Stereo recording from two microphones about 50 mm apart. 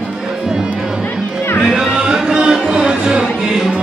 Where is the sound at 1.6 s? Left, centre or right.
Centre.